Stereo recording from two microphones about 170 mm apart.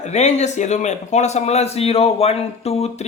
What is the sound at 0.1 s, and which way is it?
Speech, 40° left (ahead or behind).